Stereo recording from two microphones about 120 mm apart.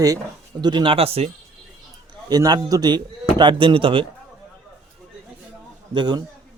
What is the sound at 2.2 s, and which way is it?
A man's voice, 35° right (ahead or behind).